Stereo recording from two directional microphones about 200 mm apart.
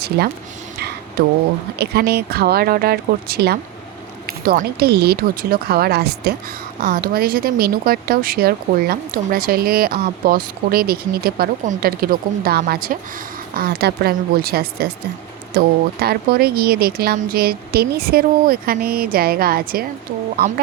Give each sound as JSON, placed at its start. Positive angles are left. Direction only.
{"t": 0.2, "sound": "speech", "side_deg": -55}